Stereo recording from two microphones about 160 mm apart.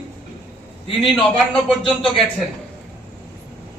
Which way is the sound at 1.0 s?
Centre (ahead or behind).